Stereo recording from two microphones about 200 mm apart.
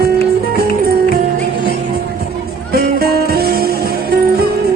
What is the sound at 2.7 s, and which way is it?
Music, 50° right (ahead or behind).